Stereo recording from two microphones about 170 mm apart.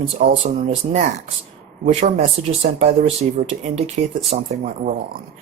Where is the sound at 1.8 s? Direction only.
45° right (ahead or behind).